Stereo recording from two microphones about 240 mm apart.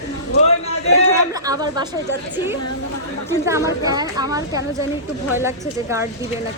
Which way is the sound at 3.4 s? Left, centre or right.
Centre.